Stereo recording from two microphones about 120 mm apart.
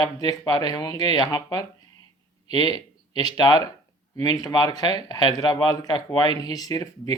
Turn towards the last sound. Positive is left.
turn(degrees=30)  # may be behind; listen again after turning